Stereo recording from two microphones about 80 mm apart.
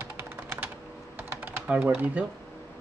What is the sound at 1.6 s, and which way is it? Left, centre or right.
Speech, centre.